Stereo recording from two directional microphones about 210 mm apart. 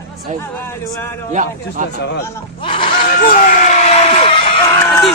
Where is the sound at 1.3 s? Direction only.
40° right (ahead or behind).